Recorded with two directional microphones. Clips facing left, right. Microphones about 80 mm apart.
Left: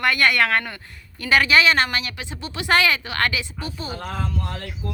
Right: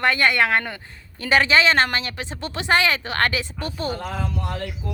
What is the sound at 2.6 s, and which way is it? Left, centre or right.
A woman's voice, right.